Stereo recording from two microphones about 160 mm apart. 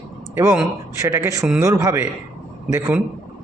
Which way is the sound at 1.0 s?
20° right (ahead or behind).